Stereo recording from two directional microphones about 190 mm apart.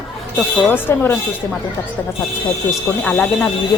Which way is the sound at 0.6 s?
10° left (ahead or behind).